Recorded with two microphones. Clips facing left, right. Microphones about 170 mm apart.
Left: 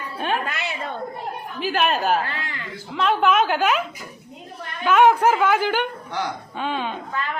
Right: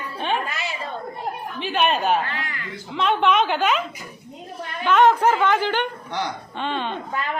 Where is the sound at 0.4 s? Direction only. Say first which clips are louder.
Left 1 dB; 60° left (ahead or behind).